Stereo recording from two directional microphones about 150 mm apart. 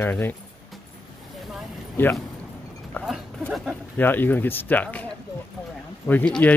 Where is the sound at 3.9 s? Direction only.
15° left (ahead or behind).